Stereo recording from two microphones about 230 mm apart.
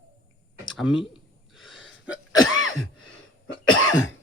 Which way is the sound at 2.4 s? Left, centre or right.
Left.